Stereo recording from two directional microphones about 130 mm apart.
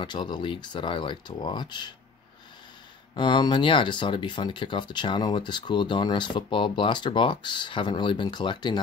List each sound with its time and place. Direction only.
0.0 s speech: 35° left (ahead or behind)
3.2 s speech: 35° left (ahead or behind)